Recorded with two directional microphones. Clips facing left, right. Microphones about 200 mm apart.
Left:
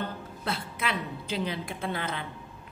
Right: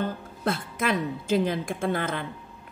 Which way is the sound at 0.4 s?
45° right (ahead or behind).